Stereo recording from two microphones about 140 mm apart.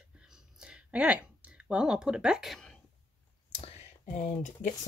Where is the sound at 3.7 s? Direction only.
60° left (ahead or behind).